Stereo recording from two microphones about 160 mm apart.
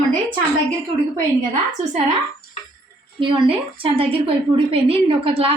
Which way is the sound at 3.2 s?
30° right (ahead or behind).